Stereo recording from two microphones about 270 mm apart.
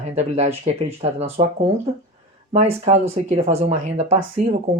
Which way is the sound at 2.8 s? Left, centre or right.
Right.